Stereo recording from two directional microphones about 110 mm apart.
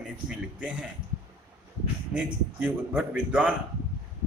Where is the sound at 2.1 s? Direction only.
15° right (ahead or behind).